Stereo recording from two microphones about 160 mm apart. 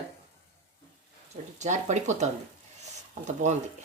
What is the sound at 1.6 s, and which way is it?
Speech, 45° right (ahead or behind).